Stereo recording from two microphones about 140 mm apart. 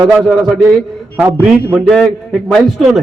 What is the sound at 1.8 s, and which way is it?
A man's voice, centre (ahead or behind).